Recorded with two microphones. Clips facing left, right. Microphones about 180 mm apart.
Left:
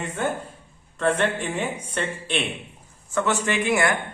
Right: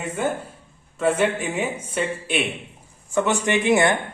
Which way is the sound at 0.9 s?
5° right (ahead or behind).